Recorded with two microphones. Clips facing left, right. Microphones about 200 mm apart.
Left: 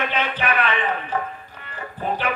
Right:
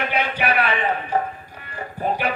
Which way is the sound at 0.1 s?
10° right (ahead or behind).